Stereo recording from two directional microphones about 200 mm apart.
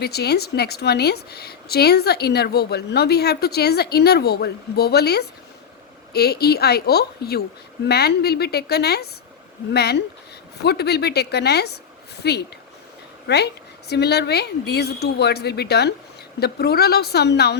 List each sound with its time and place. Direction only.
0.0 s a woman's voice: 55° left (ahead or behind)